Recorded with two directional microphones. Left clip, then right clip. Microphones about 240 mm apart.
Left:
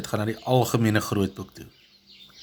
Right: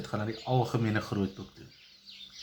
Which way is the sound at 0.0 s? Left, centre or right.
Left.